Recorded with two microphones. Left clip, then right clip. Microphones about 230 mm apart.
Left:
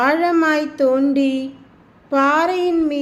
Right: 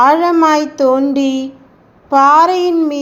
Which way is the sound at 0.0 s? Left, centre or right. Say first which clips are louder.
Right 6 dB; centre.